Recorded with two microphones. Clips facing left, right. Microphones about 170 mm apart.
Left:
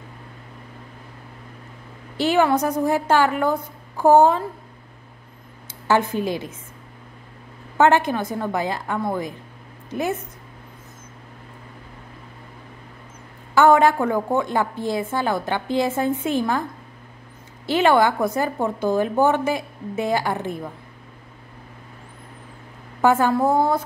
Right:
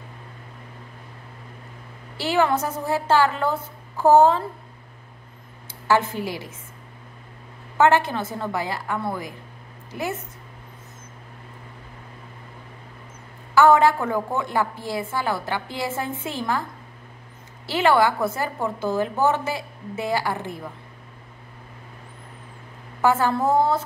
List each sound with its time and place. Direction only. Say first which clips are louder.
2.1 s a woman's voice: left 3 dB; 20° left (ahead or behind)
5.9 s a woman's voice: left 2 dB; 20° left (ahead or behind)
7.7 s a woman's voice: left 1 dB; 20° left (ahead or behind)
13.6 s a woman's voice: left 1 dB; 20° left (ahead or behind)
17.6 s a woman's voice: left 2 dB; 20° left (ahead or behind)
23.0 s a woman's voice: left 3 dB; 15° left (ahead or behind)